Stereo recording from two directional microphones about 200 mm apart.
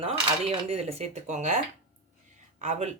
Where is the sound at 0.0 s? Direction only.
30° right (ahead or behind).